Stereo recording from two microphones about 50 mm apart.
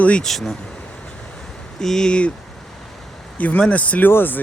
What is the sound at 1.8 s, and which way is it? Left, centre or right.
Speech, centre.